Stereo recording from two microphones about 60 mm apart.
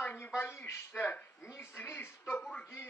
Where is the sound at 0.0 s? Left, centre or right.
Left.